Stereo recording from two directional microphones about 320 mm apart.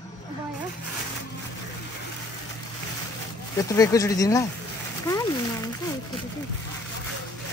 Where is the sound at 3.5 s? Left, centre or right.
Centre.